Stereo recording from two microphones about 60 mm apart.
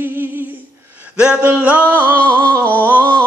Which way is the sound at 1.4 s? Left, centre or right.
Right.